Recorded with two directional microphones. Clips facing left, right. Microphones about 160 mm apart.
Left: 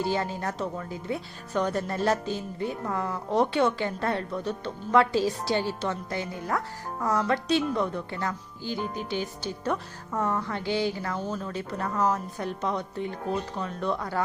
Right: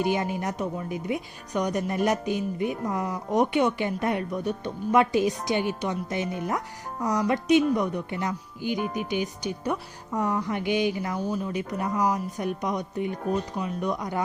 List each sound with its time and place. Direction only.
0.0 s a woman's voice: 15° right (ahead or behind)